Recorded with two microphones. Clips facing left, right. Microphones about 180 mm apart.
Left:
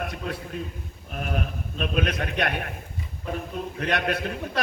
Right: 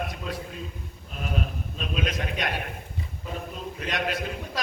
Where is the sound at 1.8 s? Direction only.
55° left (ahead or behind).